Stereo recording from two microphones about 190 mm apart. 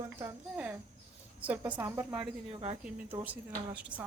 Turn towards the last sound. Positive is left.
turn(degrees=-10)  # may be behind; listen again after turning